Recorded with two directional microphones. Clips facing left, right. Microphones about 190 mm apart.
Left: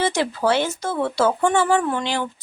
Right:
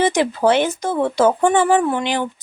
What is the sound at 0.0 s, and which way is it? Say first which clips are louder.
Speech: right 5 dB; 15° right (ahead or behind).